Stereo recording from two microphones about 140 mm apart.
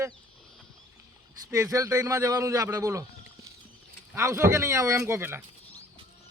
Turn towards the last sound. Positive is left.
turn(degrees=-15)  # may be behind; listen again after turning